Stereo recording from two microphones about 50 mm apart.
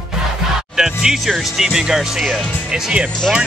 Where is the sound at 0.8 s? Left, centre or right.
Centre.